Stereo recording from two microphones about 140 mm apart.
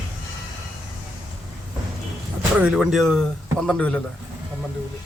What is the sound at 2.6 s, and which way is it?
A man's voice, 5° right (ahead or behind).